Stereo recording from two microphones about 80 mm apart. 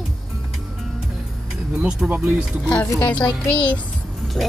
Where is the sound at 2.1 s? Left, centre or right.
Centre.